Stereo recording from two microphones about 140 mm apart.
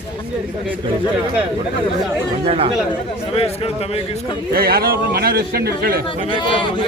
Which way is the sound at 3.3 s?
45° left (ahead or behind).